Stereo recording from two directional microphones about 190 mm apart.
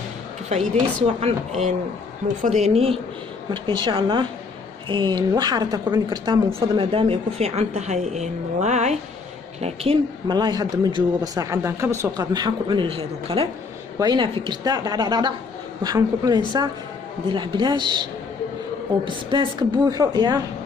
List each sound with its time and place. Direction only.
0.5 s speech: 35° right (ahead or behind)
2.4 s a woman's voice: 35° right (ahead or behind)
9.6 s a woman's voice: 25° right (ahead or behind)
19.0 s a woman's voice: 25° right (ahead or behind)